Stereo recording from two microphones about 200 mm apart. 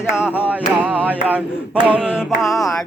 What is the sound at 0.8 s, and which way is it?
Mantra, 10° right (ahead or behind).